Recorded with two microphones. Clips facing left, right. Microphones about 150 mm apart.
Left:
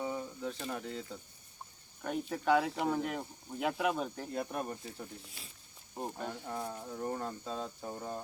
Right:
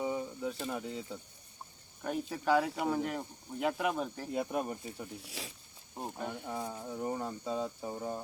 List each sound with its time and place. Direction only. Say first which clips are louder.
0.0 s a sound: right 3 dB; 10° right (ahead or behind)
0.7 s speech: right 1 dB; 10° right (ahead or behind)
4.3 s speech: right 3 dB; 10° right (ahead or behind)
5.4 s speech: right 10 dB; 90° right
6.0 s speech: even; 5° right (ahead or behind)